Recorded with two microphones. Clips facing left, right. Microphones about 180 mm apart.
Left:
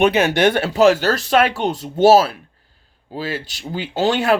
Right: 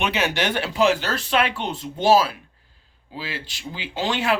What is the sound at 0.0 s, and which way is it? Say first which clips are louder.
Speech: left 9 dB; 50° left (ahead or behind).